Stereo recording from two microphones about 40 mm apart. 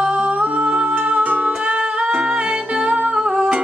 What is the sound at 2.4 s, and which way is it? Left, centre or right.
Music, right.